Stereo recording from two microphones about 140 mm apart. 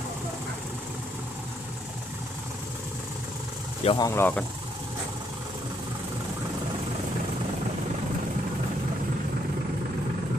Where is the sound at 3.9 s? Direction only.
20° left (ahead or behind).